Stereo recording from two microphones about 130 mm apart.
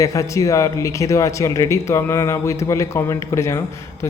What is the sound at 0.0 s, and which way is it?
A man's voice, 25° left (ahead or behind).